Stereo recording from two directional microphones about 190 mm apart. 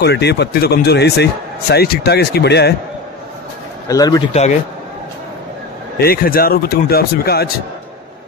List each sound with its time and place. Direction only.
0.0 s speech: 60° left (ahead or behind)
3.9 s speech: 20° left (ahead or behind)
4.3 s speech: 35° left (ahead or behind)
5.9 s speech: 50° left (ahead or behind)